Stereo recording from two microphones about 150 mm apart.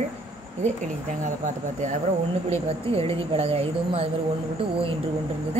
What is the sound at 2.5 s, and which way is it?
Speech, 40° right (ahead or behind).